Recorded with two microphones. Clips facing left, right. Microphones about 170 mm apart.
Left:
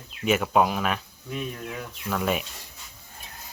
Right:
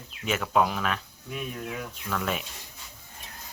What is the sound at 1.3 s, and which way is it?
Speech, 5° right (ahead or behind).